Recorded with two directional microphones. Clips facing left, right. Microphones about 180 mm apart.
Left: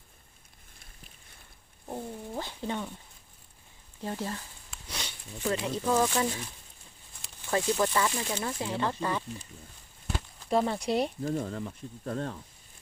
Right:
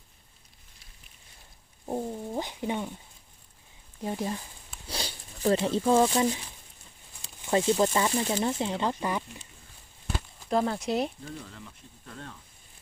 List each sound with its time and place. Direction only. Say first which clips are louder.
1.9 s speech: right 5 dB; 20° right (ahead or behind)
4.0 s speech: right 3 dB; 15° right (ahead or behind)
4.9 s speech: right 4 dB; 35° right (ahead or behind)
7.4 s speech: right 4 dB; 25° right (ahead or behind)
10.5 s speech: even; centre (ahead or behind)
11.3 s speech: left 10 dB; 45° left (ahead or behind)